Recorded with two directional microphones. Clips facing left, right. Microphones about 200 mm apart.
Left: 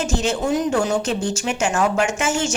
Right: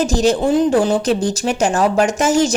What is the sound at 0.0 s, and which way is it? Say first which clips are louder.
A woman's voice: right 6 dB; 35° right (ahead or behind).